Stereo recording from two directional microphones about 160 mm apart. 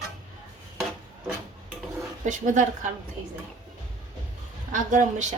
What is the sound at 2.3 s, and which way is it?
Speech, 50° right (ahead or behind).